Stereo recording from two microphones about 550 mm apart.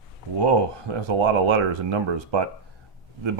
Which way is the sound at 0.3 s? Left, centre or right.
Right.